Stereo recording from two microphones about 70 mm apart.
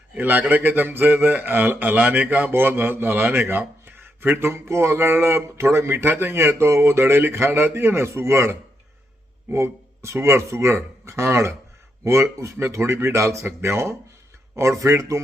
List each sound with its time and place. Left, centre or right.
0.1 s a man's voice: right